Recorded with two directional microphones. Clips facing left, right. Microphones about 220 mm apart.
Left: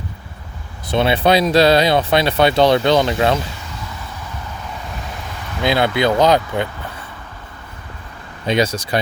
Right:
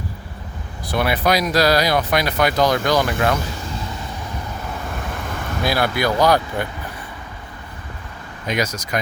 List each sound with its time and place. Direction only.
0.9 s speech: 25° left (ahead or behind)
5.6 s speech: 20° left (ahead or behind)
8.4 s speech: 30° left (ahead or behind)